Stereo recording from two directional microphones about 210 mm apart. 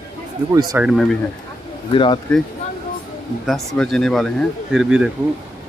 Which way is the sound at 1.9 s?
25° left (ahead or behind).